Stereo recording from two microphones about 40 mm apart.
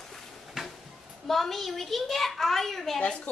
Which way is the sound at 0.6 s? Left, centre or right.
Centre.